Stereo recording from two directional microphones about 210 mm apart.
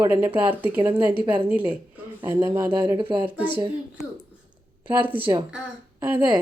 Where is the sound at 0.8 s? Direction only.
20° right (ahead or behind).